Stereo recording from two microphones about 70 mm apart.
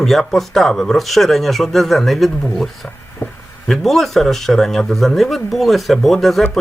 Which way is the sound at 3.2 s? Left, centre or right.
Left.